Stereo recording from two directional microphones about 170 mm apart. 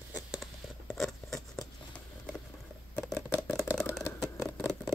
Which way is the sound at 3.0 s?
5° left (ahead or behind).